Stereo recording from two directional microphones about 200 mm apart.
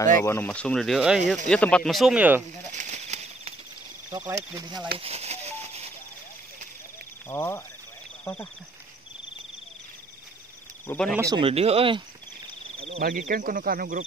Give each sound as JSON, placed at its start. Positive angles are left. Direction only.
{"t": 0.2, "sound": "speech", "side_deg": 10}
{"t": 2.7, "sound": "a sound", "side_deg": -35}
{"t": 4.1, "sound": "speech", "side_deg": -15}
{"t": 4.9, "sound": "a sound", "side_deg": -30}
{"t": 7.2, "sound": "speech", "side_deg": 15}
{"t": 10.9, "sound": "speech", "side_deg": 5}
{"t": 11.1, "sound": "speech", "side_deg": -15}
{"t": 11.4, "sound": "speech", "side_deg": -30}
{"t": 12.7, "sound": "cricket", "side_deg": -30}
{"t": 13.0, "sound": "speech", "side_deg": -45}